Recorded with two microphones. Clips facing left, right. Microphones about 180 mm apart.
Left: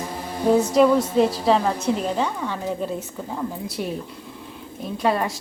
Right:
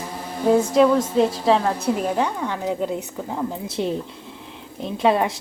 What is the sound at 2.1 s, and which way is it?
A woman's voice, 15° right (ahead or behind).